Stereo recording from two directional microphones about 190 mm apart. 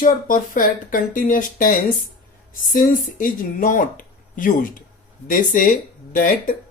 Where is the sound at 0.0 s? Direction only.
45° left (ahead or behind).